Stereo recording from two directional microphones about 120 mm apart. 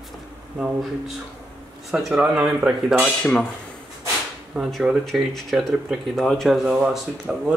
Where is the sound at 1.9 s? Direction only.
Centre (ahead or behind).